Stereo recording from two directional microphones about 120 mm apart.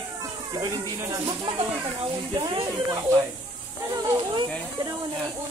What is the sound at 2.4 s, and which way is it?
Speech, 35° right (ahead or behind).